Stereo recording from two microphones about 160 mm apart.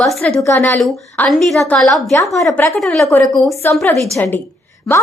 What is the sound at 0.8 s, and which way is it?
A woman's voice, centre (ahead or behind).